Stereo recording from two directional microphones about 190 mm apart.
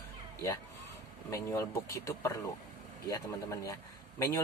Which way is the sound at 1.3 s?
15° left (ahead or behind).